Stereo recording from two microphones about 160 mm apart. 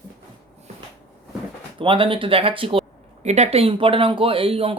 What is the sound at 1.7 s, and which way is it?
Speech, 35° right (ahead or behind).